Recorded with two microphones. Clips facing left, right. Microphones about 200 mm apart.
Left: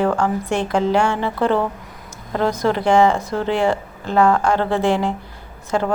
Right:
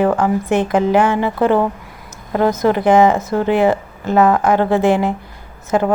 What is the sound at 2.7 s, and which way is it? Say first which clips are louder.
A woman's voice: right 3 dB; 15° right (ahead or behind).